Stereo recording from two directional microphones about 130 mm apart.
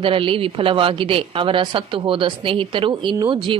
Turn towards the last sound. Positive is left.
turn(degrees=-40)  # may be behind; listen again after turning